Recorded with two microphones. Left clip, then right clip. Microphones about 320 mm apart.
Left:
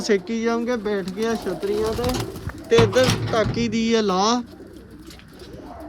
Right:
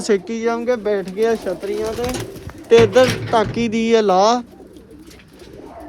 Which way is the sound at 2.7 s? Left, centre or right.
Centre.